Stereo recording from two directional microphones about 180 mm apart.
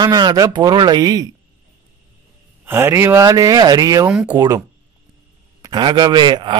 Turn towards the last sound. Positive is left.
turn(degrees=-25)  # may be behind; listen again after turning